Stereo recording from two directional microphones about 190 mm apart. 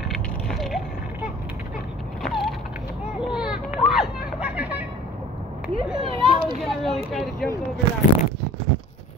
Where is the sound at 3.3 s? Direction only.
5° right (ahead or behind).